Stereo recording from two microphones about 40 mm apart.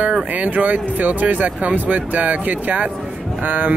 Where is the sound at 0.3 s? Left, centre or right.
Right.